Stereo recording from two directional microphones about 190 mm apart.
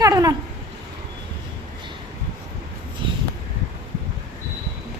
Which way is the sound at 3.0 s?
25° right (ahead or behind).